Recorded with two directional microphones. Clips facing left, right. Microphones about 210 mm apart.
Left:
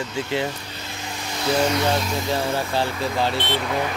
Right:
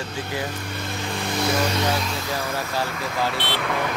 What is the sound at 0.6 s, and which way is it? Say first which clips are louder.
Vehicle: right 5 dB; 55° right (ahead or behind).